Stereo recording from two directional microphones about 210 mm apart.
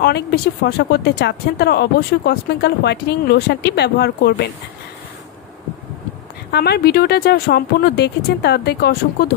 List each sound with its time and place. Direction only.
0.0 s speech: 50° left (ahead or behind)
6.5 s speech: 50° left (ahead or behind)